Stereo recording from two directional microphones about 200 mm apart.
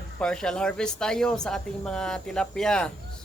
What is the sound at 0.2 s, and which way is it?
Speech, 5° left (ahead or behind).